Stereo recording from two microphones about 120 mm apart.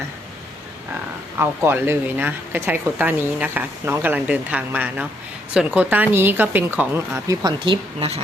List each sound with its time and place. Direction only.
1.4 s speech: 20° right (ahead or behind)
7.4 s speech: 45° right (ahead or behind)